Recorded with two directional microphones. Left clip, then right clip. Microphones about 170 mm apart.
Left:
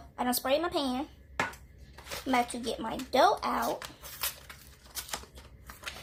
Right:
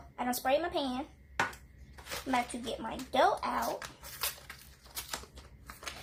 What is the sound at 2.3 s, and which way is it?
Speech, 40° left (ahead or behind).